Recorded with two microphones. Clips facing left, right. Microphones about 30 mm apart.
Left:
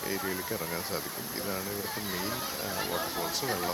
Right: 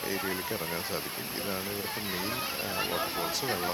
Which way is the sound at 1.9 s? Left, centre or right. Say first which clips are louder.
Right 1 dB; right.